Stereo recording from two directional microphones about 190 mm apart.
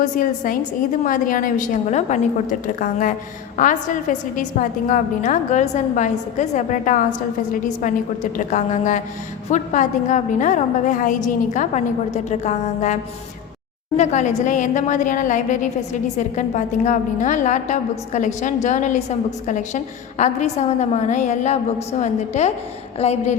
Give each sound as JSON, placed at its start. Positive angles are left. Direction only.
{"t": 0.0, "sound": "a woman's voice", "side_deg": 45}